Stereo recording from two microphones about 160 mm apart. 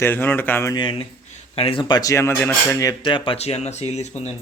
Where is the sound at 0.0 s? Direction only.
10° left (ahead or behind).